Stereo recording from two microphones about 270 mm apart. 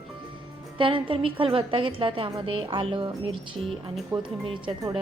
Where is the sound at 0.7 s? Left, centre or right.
Centre.